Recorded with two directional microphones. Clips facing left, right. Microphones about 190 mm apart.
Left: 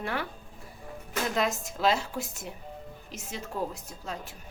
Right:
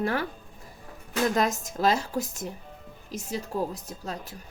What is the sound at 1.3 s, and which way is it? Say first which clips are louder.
A woman's voice: right 3 dB; 40° right (ahead or behind).